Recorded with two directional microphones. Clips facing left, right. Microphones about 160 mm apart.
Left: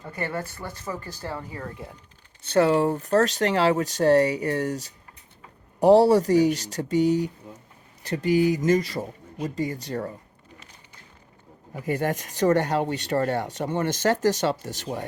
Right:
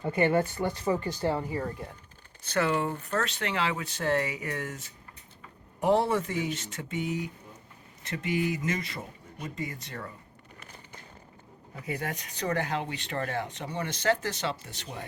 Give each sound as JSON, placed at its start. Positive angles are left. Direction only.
{"t": 0.0, "sound": "speech", "side_deg": -20}
{"t": 1.8, "sound": "speech", "side_deg": 0}
{"t": 2.4, "sound": "speech", "side_deg": 30}
{"t": 12.1, "sound": "speech", "side_deg": 45}